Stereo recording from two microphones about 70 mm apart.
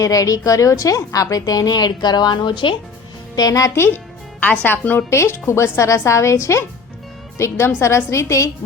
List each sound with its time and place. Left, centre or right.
0.0 s a woman's voice: left
3.3 s a woman's voice: left
3.8 s speech: left
5.1 s a woman's voice: left